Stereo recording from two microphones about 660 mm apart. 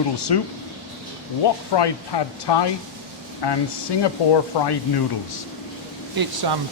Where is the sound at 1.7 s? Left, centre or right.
Left.